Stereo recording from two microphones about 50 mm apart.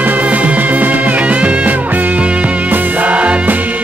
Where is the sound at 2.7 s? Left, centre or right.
Right.